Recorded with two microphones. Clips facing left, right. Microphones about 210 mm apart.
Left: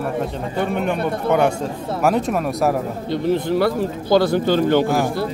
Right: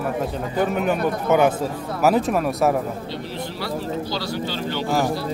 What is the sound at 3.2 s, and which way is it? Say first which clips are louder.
Speech: left 15 dB; 50° left (ahead or behind).